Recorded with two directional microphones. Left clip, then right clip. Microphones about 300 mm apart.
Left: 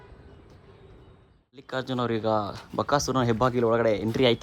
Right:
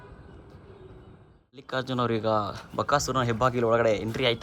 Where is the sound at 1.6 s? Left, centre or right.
Centre.